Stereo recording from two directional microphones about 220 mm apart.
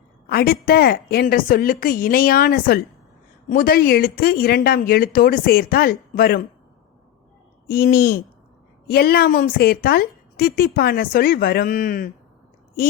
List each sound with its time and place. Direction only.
0.3 s a woman's voice: 45° left (ahead or behind)
7.7 s a woman's voice: 45° left (ahead or behind)